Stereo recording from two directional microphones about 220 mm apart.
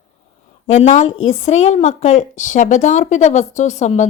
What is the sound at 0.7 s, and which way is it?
A woman's voice, 30° left (ahead or behind).